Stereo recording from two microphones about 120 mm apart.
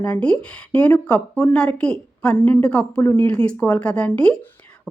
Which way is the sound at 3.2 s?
10° left (ahead or behind).